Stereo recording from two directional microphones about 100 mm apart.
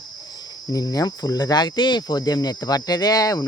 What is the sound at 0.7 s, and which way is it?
Speech, 40° left (ahead or behind).